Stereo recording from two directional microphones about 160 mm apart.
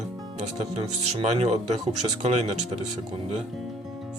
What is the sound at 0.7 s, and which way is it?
Speech, 40° right (ahead or behind).